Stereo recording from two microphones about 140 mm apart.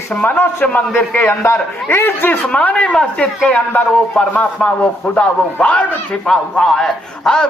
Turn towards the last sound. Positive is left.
turn(degrees=5)  # may be behind; listen again after turning